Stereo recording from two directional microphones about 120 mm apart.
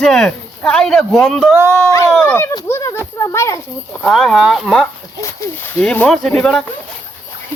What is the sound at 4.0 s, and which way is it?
Speech, 5° left (ahead or behind).